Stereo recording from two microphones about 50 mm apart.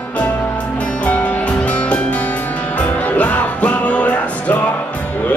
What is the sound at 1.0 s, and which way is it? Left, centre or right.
Music, left.